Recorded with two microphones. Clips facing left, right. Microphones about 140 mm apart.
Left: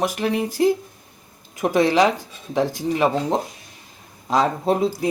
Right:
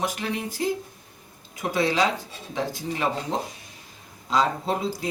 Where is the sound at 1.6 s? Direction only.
45° left (ahead or behind).